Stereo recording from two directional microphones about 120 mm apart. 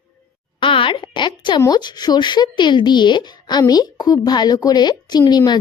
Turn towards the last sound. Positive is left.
turn(degrees=35)  # may be behind; listen again after turning